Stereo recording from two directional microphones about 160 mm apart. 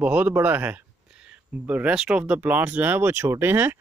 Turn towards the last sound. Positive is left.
turn(degrees=-15)  # may be behind; listen again after turning